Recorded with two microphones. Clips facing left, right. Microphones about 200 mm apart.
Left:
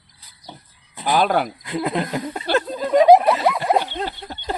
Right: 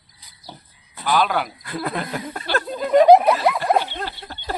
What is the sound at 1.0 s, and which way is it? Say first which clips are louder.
Speech: left 2 dB; 45° left (ahead or behind).